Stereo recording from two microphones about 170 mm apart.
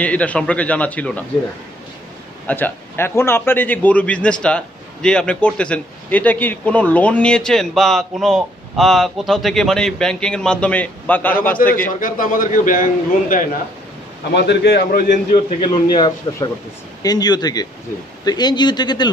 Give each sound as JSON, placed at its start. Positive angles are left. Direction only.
{"t": 0.0, "sound": "a man's voice", "side_deg": 10}
{"t": 2.4, "sound": "a man's voice", "side_deg": 10}
{"t": 11.7, "sound": "a man's voice", "side_deg": 55}
{"t": 14.3, "sound": "a man's voice", "side_deg": 75}
{"t": 15.6, "sound": "a man's voice", "side_deg": 30}